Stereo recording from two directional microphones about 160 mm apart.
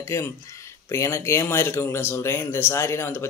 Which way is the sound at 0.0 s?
20° left (ahead or behind).